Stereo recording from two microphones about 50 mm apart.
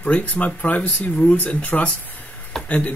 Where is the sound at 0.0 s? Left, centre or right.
Left.